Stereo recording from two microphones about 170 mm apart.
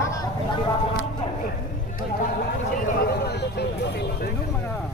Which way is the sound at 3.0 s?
70° left (ahead or behind).